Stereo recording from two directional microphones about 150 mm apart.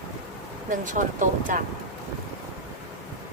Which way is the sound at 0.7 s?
60° right (ahead or behind).